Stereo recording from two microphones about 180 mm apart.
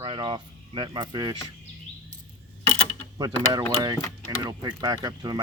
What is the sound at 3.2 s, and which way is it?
Speech, 20° right (ahead or behind).